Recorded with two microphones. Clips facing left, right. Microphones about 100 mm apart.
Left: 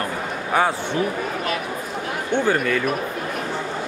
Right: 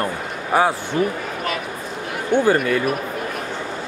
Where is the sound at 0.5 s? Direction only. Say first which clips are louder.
Right 2 dB; 5° right (ahead or behind).